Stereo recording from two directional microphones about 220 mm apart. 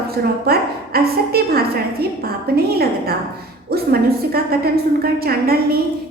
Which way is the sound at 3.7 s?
45° right (ahead or behind).